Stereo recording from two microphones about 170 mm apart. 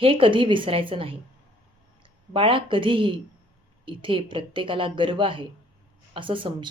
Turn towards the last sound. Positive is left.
turn(degrees=-30)  # may be behind; listen again after turning